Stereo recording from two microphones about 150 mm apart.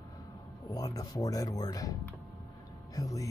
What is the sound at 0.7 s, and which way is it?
Speech, 25° left (ahead or behind).